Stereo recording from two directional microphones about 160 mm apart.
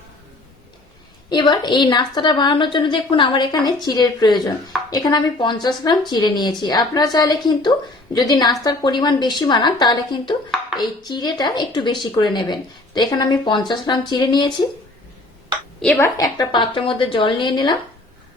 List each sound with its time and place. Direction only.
1.3 s speech: 30° left (ahead or behind)
15.8 s a woman's voice: 5° left (ahead or behind)
16.1 s speech: 25° left (ahead or behind)